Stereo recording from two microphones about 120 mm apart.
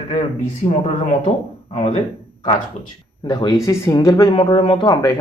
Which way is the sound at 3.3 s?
35° left (ahead or behind).